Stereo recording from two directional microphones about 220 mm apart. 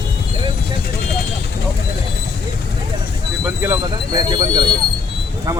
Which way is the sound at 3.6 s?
15° right (ahead or behind).